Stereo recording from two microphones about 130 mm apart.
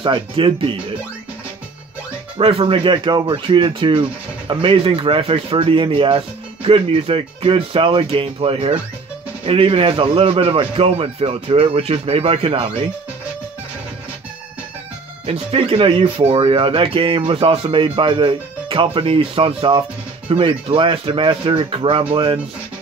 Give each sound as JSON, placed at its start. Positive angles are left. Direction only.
{"t": 0.0, "sound": "speech", "side_deg": -40}
{"t": 2.3, "sound": "speech", "side_deg": -45}
{"t": 15.2, "sound": "speech", "side_deg": -50}